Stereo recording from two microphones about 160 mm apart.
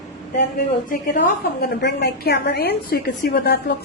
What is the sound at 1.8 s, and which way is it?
A woman's voice, 80° left.